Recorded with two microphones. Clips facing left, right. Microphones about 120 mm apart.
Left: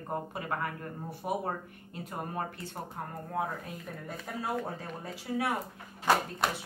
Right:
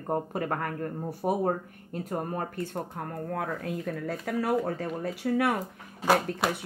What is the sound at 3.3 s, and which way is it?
Speech, 85° right.